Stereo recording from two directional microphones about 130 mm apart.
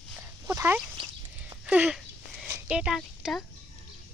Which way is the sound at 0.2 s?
20° right (ahead or behind).